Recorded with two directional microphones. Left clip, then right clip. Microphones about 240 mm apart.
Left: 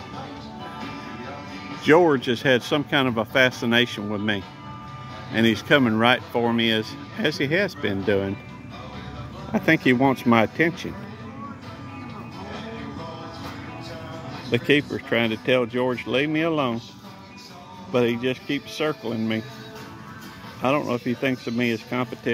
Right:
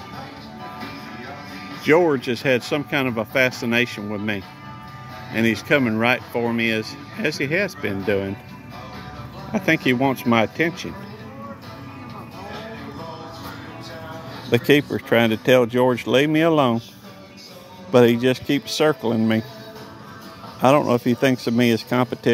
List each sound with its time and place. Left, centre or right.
0.7 s music: right
1.8 s speech: centre
9.5 s speech: centre
14.5 s speech: right
17.9 s speech: right
20.6 s speech: right